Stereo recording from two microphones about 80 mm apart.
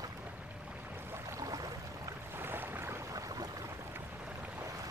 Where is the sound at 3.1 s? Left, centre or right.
Right.